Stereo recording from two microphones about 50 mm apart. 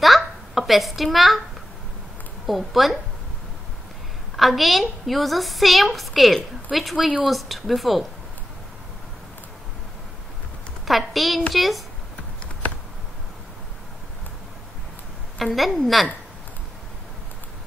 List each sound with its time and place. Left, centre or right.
0.0 s a sound: centre
2.4 s a woman's voice: centre
4.4 s a woman's voice: centre
7.0 s speech: centre
7.2 s a woman's voice: centre
10.9 s a sound: centre
11.5 s a woman's voice: centre
15.3 s a woman's voice: centre